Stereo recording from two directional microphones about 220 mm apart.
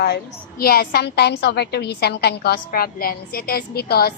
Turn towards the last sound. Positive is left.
turn(degrees=45)  # may be behind; listen again after turning